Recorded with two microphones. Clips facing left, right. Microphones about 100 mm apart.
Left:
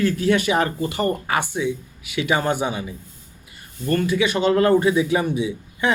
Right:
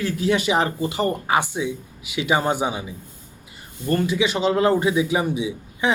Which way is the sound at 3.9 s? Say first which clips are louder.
Left 1 dB; 20° right (ahead or behind).